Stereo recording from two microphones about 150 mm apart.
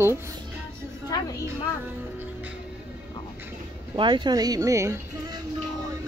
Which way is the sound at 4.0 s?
30° right (ahead or behind).